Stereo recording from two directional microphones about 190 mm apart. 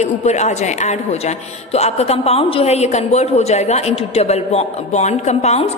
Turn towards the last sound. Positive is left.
turn(degrees=35)  # may be behind; listen again after turning